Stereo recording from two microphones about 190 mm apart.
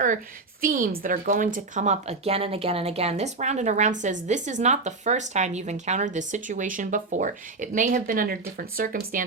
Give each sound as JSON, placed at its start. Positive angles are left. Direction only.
{"t": 0.6, "sound": "a woman's voice", "side_deg": -45}